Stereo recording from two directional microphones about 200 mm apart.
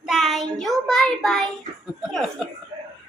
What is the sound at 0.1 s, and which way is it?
Child singing, centre (ahead or behind).